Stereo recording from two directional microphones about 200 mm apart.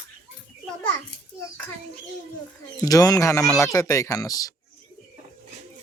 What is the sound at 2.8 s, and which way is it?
Speech, 20° left (ahead or behind).